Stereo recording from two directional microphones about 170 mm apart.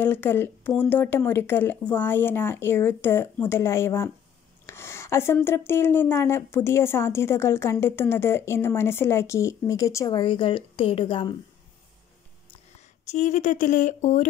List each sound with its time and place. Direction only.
0.0 s speech: 10° left (ahead or behind); by 11.3 s 30° left (ahead or behind)
12.7 s speech: 45° left (ahead or behind)